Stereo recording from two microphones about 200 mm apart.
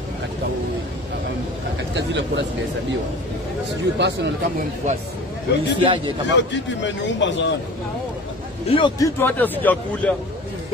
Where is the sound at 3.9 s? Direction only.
60° right (ahead or behind).